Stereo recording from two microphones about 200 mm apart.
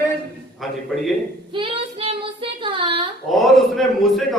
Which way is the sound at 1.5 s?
25° right (ahead or behind).